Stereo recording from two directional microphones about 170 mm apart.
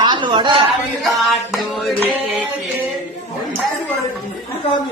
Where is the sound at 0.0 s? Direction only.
30° right (ahead or behind).